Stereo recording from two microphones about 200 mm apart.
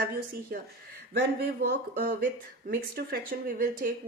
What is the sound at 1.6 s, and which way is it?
Speech, 45° right (ahead or behind).